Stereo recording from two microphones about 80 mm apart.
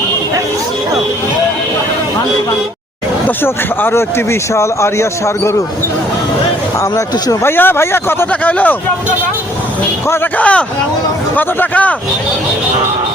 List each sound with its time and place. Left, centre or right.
3.2 s speech: left
7.4 s speech: left
8.3 s speech: centre
10.3 s speech: centre